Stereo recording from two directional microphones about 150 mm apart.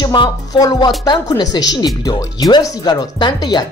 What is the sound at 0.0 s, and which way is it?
Speech, 30° left (ahead or behind).